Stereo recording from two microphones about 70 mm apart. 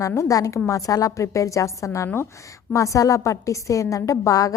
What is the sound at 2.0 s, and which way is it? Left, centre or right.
Speech, left.